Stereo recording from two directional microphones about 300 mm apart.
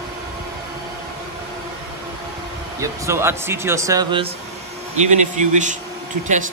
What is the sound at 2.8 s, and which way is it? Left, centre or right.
Speech, centre.